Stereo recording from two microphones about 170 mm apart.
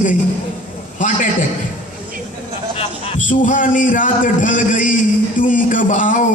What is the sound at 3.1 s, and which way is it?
Speech, 50° left (ahead or behind).